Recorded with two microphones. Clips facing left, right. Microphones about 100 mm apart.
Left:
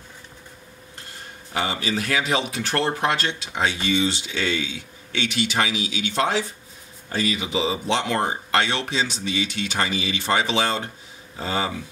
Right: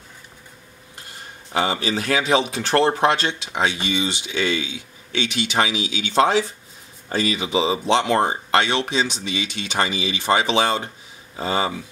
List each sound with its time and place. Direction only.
1.5 s speech: 25° right (ahead or behind)
3.5 s speech: 15° right (ahead or behind)
7.1 s speech: 25° right (ahead or behind)